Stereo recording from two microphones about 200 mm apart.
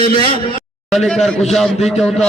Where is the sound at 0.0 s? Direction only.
25° left (ahead or behind).